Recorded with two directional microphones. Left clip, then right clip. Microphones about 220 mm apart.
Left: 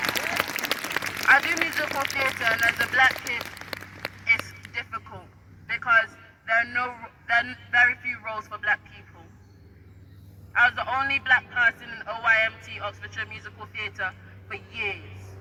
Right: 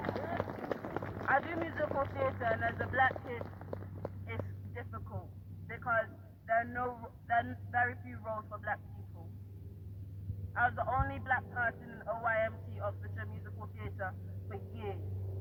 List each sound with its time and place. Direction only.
0.0 s applause: 25° left (ahead or behind)
2.0 s a sound: 20° left (ahead or behind)
6.4 s a man's voice: 30° left (ahead or behind)
10.5 s speech: 25° left (ahead or behind)